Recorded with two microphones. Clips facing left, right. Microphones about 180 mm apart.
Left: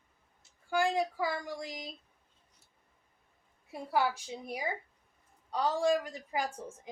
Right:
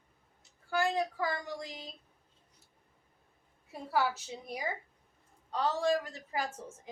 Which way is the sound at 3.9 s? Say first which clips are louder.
Left 1 dB; 15° left (ahead or behind).